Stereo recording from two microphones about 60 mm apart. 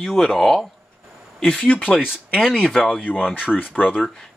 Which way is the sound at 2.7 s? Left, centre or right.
Centre.